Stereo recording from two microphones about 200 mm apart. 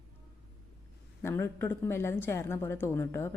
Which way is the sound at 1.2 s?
10° left (ahead or behind).